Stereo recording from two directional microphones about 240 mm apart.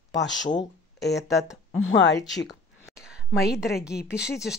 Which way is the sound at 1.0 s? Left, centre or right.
Left.